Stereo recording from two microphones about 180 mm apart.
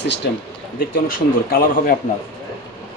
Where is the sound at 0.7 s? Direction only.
50° left (ahead or behind).